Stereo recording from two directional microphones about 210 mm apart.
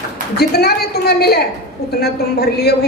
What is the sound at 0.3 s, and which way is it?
A man's voice, 50° left (ahead or behind).